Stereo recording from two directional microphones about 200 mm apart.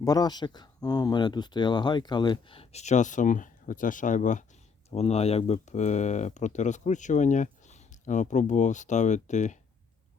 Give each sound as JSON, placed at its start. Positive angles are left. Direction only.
{"t": 0.0, "sound": "speech", "side_deg": 20}